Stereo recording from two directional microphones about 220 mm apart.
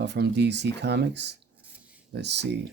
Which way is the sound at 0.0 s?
50° right (ahead or behind).